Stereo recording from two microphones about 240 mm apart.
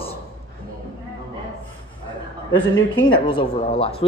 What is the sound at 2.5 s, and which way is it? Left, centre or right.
A woman's voice, centre.